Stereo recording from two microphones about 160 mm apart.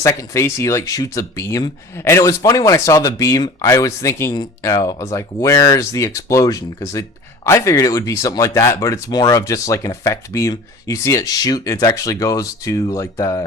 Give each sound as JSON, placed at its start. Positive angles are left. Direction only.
{"t": 0.0, "sound": "speech", "side_deg": 20}